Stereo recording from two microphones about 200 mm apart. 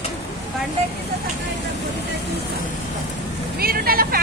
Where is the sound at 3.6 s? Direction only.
50° right (ahead or behind).